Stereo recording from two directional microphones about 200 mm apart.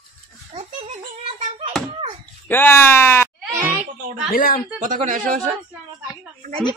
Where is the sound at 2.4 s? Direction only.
10° left (ahead or behind).